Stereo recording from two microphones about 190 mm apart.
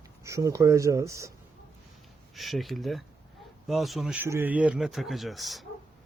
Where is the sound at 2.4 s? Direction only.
Centre (ahead or behind).